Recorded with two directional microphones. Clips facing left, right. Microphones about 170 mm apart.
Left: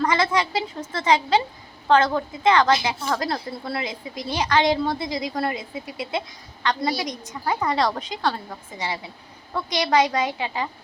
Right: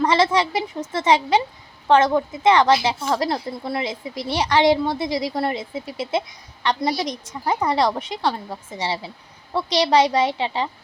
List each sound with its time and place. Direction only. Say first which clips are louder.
0.0 s a woman's voice: right 3 dB; 25° right (ahead or behind)